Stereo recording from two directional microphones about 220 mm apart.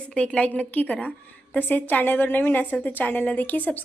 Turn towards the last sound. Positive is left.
turn(degrees=5)  # may be behind; listen again after turning